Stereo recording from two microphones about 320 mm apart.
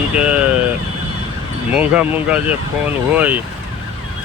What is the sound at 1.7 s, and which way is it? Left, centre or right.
Speech, centre.